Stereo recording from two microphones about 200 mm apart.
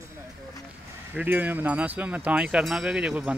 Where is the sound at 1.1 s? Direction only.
10° right (ahead or behind).